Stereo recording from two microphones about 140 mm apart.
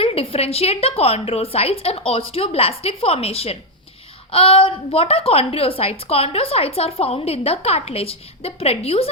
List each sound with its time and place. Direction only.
0.0 s a woman's voice: 45° left (ahead or behind)